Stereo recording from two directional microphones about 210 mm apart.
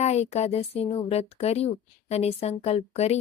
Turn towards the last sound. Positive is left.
turn(degrees=30)  # may be behind; listen again after turning